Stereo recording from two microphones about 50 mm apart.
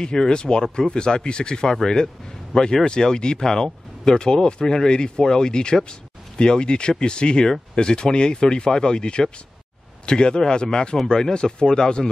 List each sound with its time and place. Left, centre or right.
0.0 s speech: centre